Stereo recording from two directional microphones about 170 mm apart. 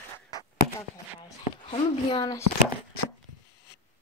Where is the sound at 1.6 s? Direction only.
30° left (ahead or behind).